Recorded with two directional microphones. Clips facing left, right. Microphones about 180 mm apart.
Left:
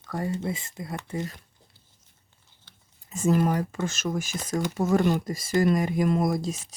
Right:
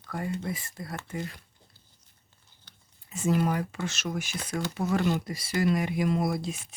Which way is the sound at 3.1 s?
45° left (ahead or behind).